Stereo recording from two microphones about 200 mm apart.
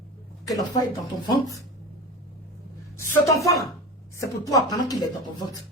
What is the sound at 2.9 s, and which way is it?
A woman's voice, 15° left (ahead or behind).